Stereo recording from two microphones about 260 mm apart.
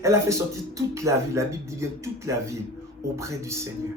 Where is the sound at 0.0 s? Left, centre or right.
Centre.